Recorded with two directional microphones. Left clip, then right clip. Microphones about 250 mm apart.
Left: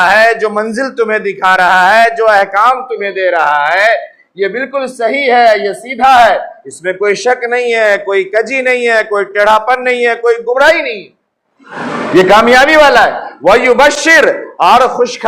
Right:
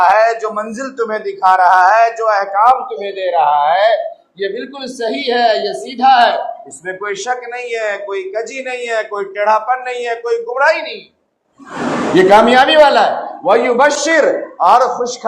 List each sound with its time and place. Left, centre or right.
0.0 s a woman's voice: left
12.3 s speech: left